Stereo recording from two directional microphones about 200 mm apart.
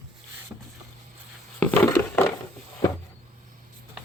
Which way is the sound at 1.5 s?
10° left (ahead or behind).